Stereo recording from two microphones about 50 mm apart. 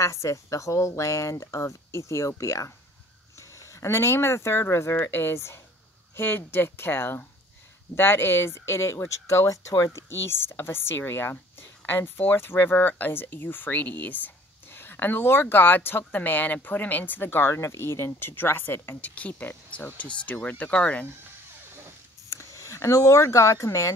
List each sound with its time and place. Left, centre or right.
0.0 s speech: left
10.0 s speech: left
17.6 s speech: left
18.9 s speech: left
22.3 s speech: left